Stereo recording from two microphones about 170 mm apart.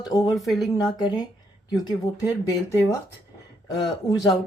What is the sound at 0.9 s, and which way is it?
Speech, 25° left (ahead or behind).